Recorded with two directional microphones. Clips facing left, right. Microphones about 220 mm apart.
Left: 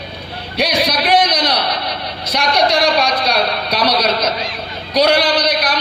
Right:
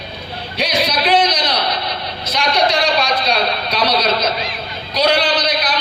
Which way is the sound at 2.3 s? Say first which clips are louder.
Left 1 dB; 65° left (ahead or behind).